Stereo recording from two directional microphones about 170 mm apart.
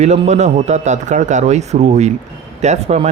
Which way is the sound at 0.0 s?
40° right (ahead or behind).